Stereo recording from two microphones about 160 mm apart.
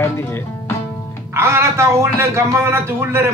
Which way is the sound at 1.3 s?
15° right (ahead or behind).